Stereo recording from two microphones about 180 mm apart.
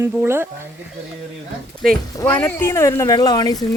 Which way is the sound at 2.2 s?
10° left (ahead or behind).